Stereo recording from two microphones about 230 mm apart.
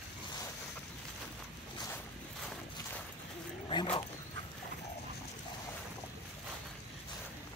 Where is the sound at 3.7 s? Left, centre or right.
Left.